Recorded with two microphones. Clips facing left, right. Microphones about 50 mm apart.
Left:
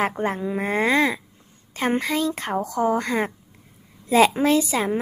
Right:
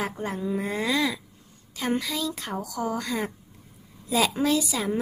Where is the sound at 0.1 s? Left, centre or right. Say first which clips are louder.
Left 4 dB; left.